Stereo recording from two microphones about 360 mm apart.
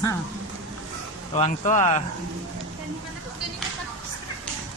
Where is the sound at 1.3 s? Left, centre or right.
Centre.